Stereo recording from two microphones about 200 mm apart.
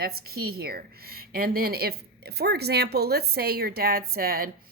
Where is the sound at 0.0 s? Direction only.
50° right (ahead or behind).